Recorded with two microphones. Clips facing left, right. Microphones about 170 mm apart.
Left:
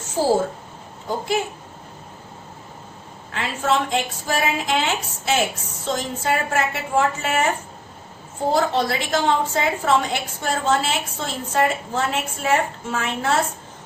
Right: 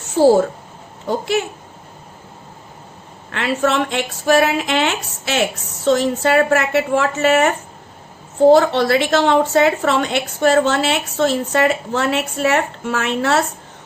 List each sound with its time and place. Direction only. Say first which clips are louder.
1.2 s a woman's voice: right 2 dB; 70° right (ahead or behind)
3.3 s a woman's voice: right 4 dB; 70° right (ahead or behind)